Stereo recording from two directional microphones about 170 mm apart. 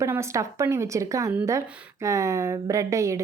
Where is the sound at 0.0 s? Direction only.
15° right (ahead or behind).